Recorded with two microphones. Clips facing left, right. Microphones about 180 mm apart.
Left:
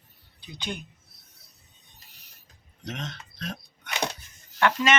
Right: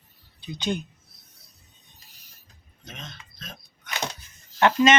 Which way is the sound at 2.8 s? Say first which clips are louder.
Left 7 dB; 70° left (ahead or behind).